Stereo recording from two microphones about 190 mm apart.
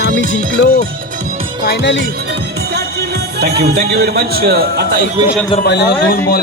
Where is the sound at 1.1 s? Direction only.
40° right (ahead or behind).